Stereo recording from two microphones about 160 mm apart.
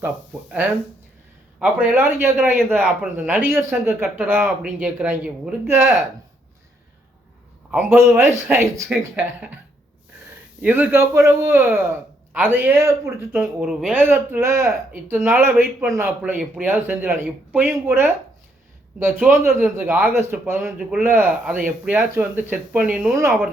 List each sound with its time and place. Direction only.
1.5 s speech: 10° right (ahead or behind)
7.7 s speech: 10° right (ahead or behind)
10.6 s speech: 10° right (ahead or behind)
13.4 s speech: centre (ahead or behind)
19.2 s speech: 15° right (ahead or behind)